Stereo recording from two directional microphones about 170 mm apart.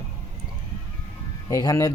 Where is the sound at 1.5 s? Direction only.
20° left (ahead or behind).